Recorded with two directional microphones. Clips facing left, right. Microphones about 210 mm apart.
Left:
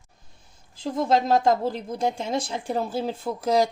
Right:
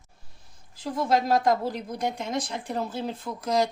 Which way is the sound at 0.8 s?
25° left (ahead or behind).